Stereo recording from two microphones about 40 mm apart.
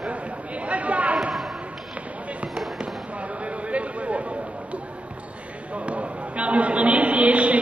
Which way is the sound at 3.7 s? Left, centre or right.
Right.